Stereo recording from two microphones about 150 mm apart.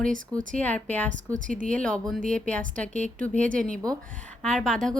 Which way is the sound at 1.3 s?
60° right (ahead or behind).